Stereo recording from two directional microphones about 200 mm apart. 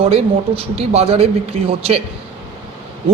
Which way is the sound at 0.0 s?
30° right (ahead or behind).